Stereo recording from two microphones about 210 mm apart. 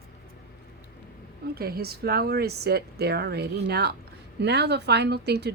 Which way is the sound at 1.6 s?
45° right (ahead or behind).